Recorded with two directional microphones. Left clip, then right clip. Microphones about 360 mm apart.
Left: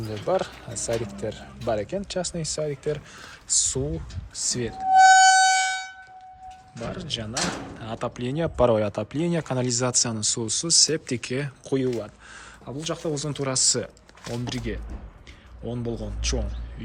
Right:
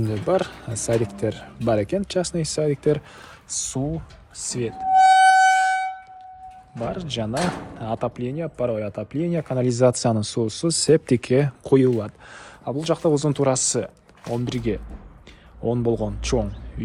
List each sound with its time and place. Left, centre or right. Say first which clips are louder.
0.0 s speech: right 3 dB; centre
5.2 s music: right 3 dB; centre
6.7 s speech: right 4 dB; centre